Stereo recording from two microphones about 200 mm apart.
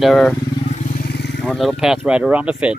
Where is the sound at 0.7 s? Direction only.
45° left (ahead or behind).